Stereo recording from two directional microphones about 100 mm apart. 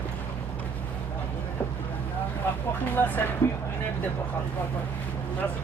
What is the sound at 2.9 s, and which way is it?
Speech, 20° left (ahead or behind).